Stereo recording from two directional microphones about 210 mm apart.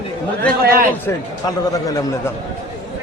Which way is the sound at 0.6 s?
45° right (ahead or behind).